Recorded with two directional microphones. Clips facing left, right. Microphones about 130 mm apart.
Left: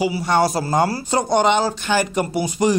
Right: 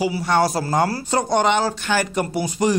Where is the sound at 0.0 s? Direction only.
15° left (ahead or behind).